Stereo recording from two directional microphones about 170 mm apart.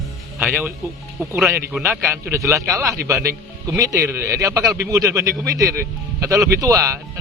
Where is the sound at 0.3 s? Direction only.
10° right (ahead or behind).